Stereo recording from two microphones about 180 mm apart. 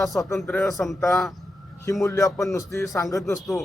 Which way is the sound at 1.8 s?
15° left (ahead or behind).